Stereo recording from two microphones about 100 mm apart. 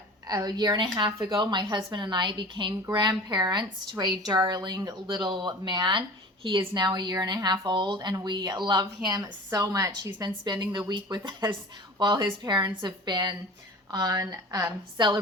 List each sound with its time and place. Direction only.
0.3 s speech: 45° right (ahead or behind)